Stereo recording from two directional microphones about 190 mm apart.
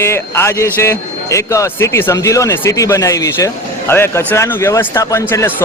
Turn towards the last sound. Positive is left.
turn(degrees=15)  # may be behind; listen again after turning